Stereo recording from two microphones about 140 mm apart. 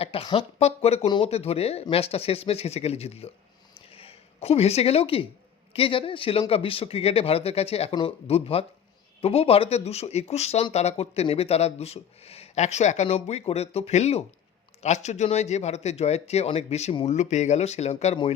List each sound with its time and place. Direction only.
0.0 s speech: 40° left (ahead or behind)
1.0 s a man's voice: 35° left (ahead or behind)
1.3 s speech: 45° left (ahead or behind)
3.8 s a sound: 45° left (ahead or behind)
5.7 s a man's voice: 40° left (ahead or behind)